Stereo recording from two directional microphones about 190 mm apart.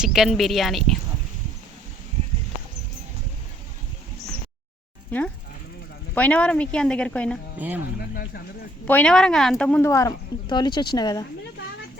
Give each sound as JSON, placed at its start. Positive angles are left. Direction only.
{"t": 0.0, "sound": "speech", "side_deg": 0}
{"t": 5.1, "sound": "speech", "side_deg": 10}
{"t": 7.6, "sound": "speech", "side_deg": -10}
{"t": 8.9, "sound": "speech", "side_deg": 5}